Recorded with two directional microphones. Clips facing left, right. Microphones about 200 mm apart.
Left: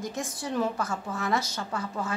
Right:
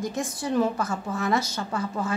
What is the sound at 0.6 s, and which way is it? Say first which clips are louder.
A woman's voice: right 3 dB; 15° right (ahead or behind).